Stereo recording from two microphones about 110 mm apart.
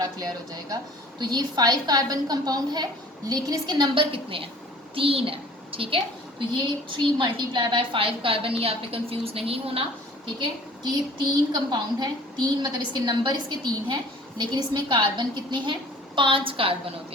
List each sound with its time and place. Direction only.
0.0 s a woman's voice: 35° right (ahead or behind); by 6.0 s 55° right (ahead or behind)
6.9 s a woman's voice: 45° right (ahead or behind); by 9.8 s 60° right (ahead or behind)
11.2 s a woman's voice: 40° right (ahead or behind)